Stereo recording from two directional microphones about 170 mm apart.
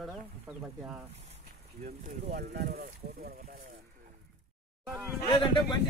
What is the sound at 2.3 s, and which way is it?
Speech, 60° right (ahead or behind).